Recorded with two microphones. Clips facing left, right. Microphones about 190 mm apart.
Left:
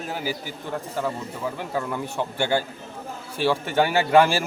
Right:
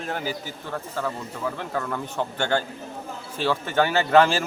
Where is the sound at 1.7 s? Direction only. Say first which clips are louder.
Left 1 dB; 15° left (ahead or behind).